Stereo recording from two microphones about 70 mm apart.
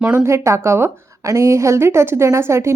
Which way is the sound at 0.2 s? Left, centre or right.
Right.